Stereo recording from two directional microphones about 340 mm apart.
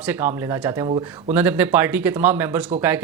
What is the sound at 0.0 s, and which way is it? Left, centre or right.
Speech, centre.